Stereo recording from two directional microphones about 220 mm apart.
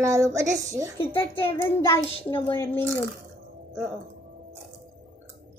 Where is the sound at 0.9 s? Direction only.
10° left (ahead or behind).